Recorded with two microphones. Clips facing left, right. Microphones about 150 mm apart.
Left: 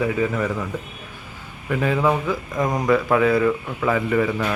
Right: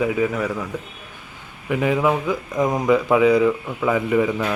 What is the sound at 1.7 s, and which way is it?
Speech, 15° right (ahead or behind).